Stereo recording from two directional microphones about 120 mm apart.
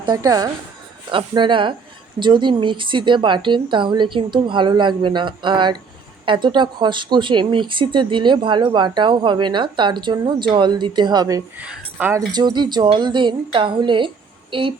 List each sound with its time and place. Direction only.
0.0 s speech: 35° right (ahead or behind)
1.3 s speech: 40° right (ahead or behind)
11.5 s speech: 15° right (ahead or behind)
12.3 s speech: 35° right (ahead or behind)